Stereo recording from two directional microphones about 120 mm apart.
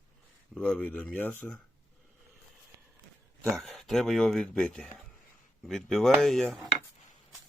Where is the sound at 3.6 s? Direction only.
Centre (ahead or behind).